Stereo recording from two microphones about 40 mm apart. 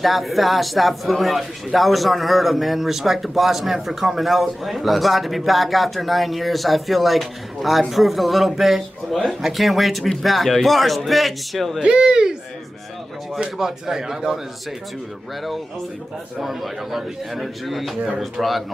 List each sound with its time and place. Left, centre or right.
0.0 s speech: centre
11.8 s speech: right
13.6 s speech: centre
16.3 s speech: centre